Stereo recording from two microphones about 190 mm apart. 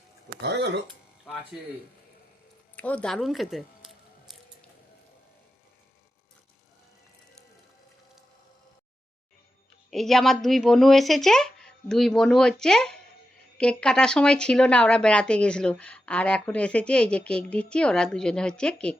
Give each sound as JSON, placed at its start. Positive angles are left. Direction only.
{"t": 0.4, "sound": "speech", "side_deg": -65}
{"t": 2.7, "sound": "a sound", "side_deg": 5}
{"t": 9.9, "sound": "speech", "side_deg": 0}